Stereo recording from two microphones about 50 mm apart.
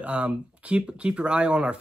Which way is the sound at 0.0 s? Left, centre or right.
Right.